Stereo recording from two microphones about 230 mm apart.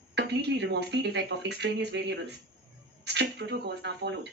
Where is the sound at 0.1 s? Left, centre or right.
Right.